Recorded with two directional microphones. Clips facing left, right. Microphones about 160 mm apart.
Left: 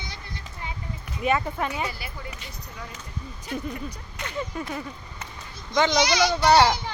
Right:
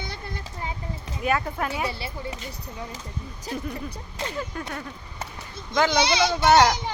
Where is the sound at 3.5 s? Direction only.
35° right (ahead or behind).